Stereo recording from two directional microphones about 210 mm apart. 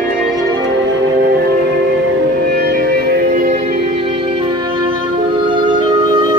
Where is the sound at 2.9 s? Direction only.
50° right (ahead or behind); by 6.2 s 20° right (ahead or behind).